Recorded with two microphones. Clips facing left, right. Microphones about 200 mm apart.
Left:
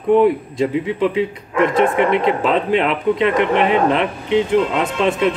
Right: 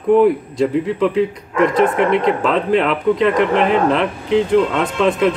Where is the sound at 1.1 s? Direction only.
Centre (ahead or behind).